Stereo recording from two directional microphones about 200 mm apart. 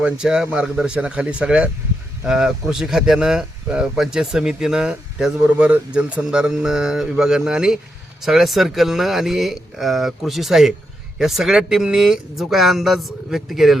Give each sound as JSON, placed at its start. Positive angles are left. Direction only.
{"t": 0.0, "sound": "speech", "side_deg": -5}